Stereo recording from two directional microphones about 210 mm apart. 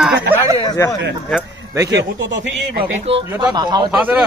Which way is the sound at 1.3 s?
15° right (ahead or behind).